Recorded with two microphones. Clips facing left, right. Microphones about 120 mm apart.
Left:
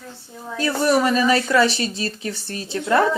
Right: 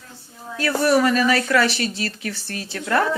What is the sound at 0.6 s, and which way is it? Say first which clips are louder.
A woman's voice: right 1 dB; 20° left (ahead or behind).